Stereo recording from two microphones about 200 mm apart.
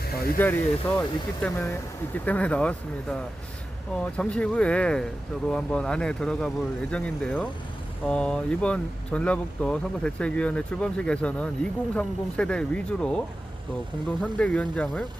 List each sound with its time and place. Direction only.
0.0 s speech: 50° left (ahead or behind)
0.3 s speech: 10° left (ahead or behind)